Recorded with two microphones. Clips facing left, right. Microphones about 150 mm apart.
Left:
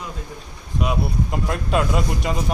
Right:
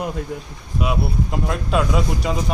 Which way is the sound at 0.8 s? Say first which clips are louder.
Right 1 dB; centre (ahead or behind).